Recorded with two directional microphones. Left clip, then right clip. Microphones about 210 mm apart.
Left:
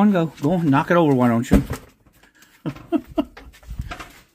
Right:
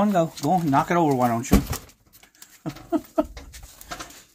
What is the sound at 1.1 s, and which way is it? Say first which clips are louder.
Speech: left 3 dB; 30° left (ahead or behind).